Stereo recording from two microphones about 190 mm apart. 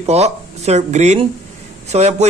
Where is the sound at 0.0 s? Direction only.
35° right (ahead or behind).